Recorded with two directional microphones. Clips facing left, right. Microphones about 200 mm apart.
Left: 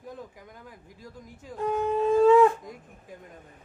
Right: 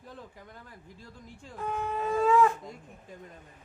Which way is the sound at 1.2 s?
40° left (ahead or behind).